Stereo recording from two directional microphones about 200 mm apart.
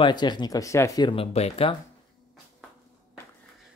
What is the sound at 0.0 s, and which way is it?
Speech, 20° left (ahead or behind).